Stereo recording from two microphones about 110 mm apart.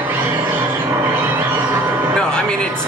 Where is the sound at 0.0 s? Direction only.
20° right (ahead or behind).